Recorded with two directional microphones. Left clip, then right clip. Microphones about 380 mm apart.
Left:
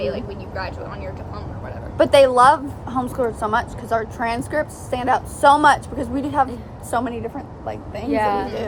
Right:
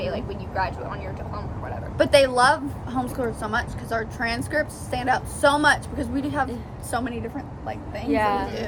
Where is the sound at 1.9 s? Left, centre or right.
Centre.